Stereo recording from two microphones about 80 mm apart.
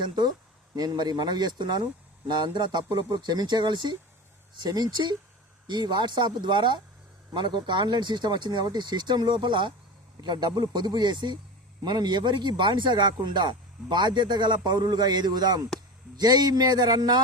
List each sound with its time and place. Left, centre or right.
0.0 s a man's voice: right
10.2 s a man's voice: right